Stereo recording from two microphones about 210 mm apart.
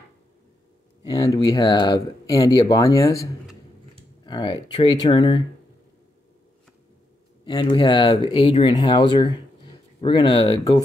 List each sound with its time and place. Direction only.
1.0 s speech: 20° left (ahead or behind)
4.2 s speech: 20° left (ahead or behind)
7.4 s speech: 20° left (ahead or behind)